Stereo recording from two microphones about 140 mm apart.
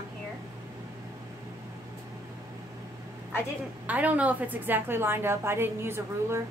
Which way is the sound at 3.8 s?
10° right (ahead or behind).